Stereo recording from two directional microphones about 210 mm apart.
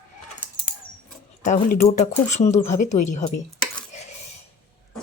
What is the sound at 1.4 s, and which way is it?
Cutlery, 40° left (ahead or behind).